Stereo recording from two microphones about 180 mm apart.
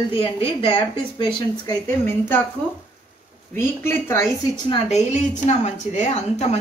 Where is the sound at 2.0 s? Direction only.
10° left (ahead or behind).